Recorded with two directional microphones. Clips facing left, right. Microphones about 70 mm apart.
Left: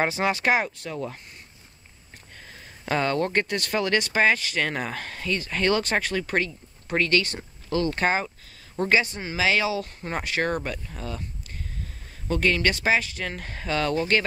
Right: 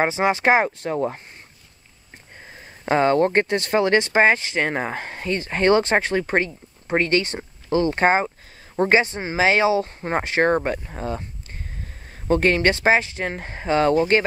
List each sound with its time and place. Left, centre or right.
0.0 s speech: right
2.4 s speech: right
12.3 s speech: right